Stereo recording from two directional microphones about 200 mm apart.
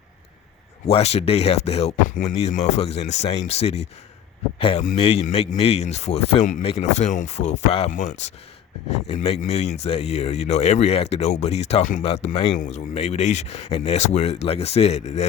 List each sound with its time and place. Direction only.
0.9 s speech: 30° left (ahead or behind)
4.9 s speech: 30° left (ahead or behind)